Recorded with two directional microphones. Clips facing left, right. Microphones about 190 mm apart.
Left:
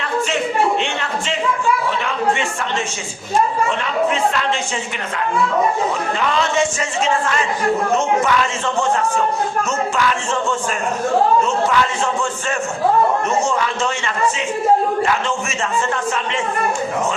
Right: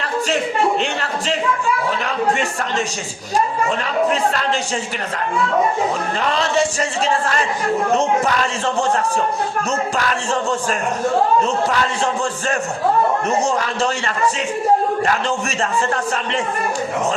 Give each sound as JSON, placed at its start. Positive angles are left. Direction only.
{"t": 2.0, "sound": "speech", "side_deg": -40}
{"t": 6.1, "sound": "speech", "side_deg": -40}
{"t": 7.9, "sound": "speech", "side_deg": -35}